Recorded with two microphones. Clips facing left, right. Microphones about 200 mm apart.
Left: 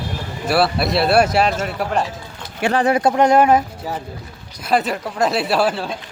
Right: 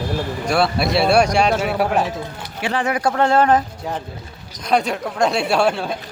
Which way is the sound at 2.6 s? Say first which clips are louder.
Left 4 dB; 45° left (ahead or behind).